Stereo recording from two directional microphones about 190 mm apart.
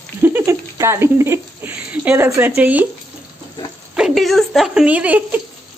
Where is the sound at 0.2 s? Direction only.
15° right (ahead or behind).